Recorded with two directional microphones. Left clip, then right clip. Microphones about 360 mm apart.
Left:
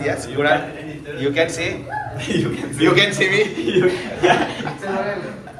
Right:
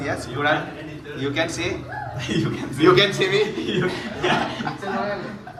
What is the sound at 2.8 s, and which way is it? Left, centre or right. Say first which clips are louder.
Speech: left 1 dB; centre.